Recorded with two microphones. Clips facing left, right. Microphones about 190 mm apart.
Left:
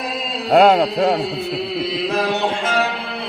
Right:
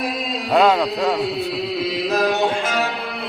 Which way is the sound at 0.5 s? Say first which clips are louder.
Left 4 dB; 50° left (ahead or behind).